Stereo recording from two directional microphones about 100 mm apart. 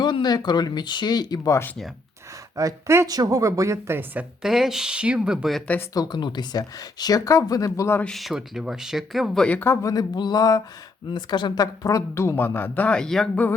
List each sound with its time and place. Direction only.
0.0 s speech: 50° left (ahead or behind)
2.6 s speech: 30° right (ahead or behind)
3.1 s a woman's voice: 40° right (ahead or behind); by 4.3 s 20° right (ahead or behind)
4.4 s speech: 5° right (ahead or behind)
5.9 s speech: 45° left (ahead or behind)
8.0 s speech: centre (ahead or behind)
9.8 s speech: 40° left (ahead or behind); by 13.4 s 5° left (ahead or behind)